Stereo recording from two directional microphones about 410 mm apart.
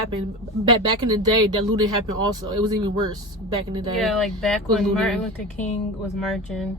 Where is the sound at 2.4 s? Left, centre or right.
Centre.